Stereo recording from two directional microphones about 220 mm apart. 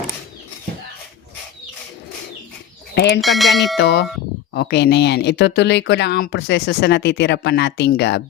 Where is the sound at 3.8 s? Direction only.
50° left (ahead or behind).